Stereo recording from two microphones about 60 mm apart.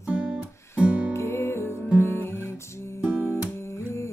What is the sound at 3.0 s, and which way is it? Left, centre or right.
Music, right.